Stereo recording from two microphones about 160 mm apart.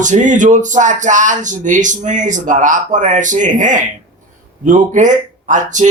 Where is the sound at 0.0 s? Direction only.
50° right (ahead or behind).